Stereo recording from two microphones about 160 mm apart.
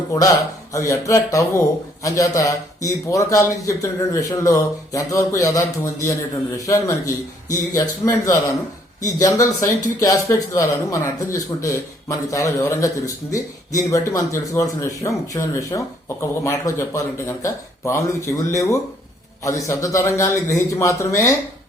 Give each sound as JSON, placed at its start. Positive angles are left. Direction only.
{"t": 0.1, "sound": "a man's voice", "side_deg": 20}